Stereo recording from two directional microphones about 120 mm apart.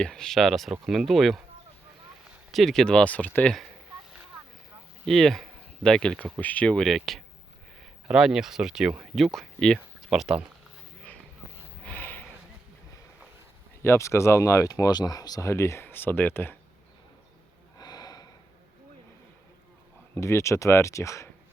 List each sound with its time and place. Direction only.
0.0 s speech: 5° left (ahead or behind)
2.5 s speech: centre (ahead or behind)
5.0 s speech: centre (ahead or behind)
11.8 s a sound: 15° left (ahead or behind)
13.8 s speech: 20° left (ahead or behind)
17.7 s snort: 35° left (ahead or behind)
20.1 s speech: 25° left (ahead or behind)